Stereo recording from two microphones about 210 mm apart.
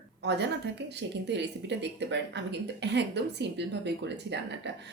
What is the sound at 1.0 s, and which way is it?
Speech, 55° right (ahead or behind).